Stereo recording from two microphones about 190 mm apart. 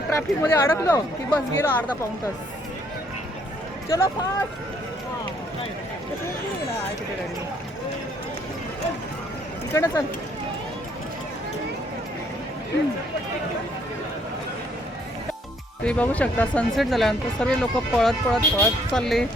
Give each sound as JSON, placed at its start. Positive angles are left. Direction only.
{"t": 0.2, "sound": "speech", "side_deg": 10}
{"t": 3.8, "sound": "speech", "side_deg": 15}
{"t": 9.7, "sound": "speech", "side_deg": 15}
{"t": 15.8, "sound": "speech", "side_deg": 5}